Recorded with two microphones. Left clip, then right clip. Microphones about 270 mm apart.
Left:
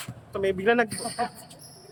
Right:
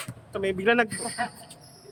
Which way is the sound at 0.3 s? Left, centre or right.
Centre.